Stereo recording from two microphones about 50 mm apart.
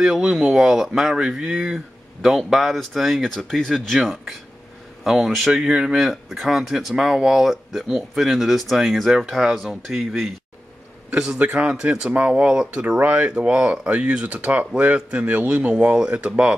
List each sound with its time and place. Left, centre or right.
0.0 s speech: centre
3.6 s speech: centre
5.9 s speech: centre
11.1 s a man's voice: centre
11.3 s speech: right
15.2 s speech: right